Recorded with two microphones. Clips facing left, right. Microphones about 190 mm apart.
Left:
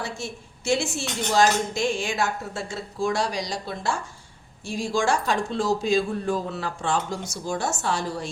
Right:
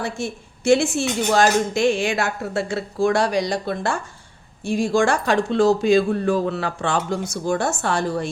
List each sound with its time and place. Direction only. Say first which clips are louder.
0.0 s speech: right 6 dB; 55° right (ahead or behind)